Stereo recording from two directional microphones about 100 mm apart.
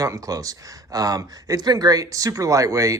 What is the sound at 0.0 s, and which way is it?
Speech, 35° right (ahead or behind).